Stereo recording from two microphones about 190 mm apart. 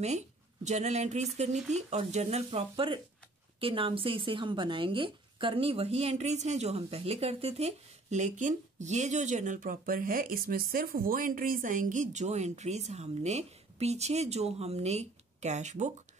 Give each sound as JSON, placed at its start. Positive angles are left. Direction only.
{"t": 0.7, "sound": "speech", "side_deg": -35}